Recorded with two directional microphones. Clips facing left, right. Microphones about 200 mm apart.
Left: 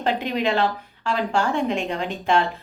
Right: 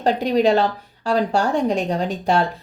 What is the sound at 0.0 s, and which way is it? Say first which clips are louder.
Speech: right 6 dB; 40° right (ahead or behind).